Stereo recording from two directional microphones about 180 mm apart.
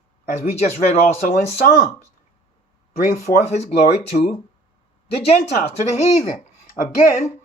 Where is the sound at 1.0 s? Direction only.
45° left (ahead or behind).